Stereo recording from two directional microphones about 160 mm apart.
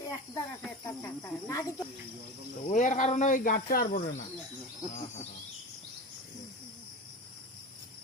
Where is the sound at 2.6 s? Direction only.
50° left (ahead or behind); by 4.0 s 65° left (ahead or behind).